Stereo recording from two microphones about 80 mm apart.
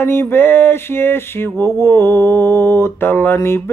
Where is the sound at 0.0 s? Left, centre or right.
Left.